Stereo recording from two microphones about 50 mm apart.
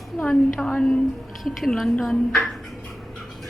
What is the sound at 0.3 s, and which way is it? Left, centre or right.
Speech, centre.